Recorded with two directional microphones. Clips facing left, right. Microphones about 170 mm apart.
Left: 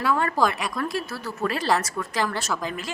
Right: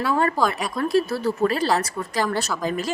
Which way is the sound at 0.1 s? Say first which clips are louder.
Right 1 dB; 30° right (ahead or behind).